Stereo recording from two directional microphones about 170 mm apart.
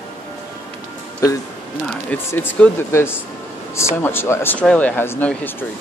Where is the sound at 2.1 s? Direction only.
15° left (ahead or behind).